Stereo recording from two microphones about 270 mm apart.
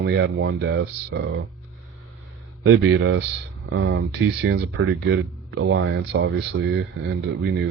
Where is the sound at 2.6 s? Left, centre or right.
Right.